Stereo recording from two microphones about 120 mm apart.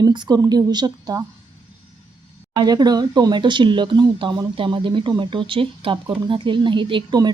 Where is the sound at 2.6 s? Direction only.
35° right (ahead or behind).